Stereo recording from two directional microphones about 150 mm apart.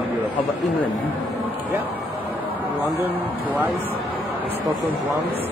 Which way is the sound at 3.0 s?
10° right (ahead or behind).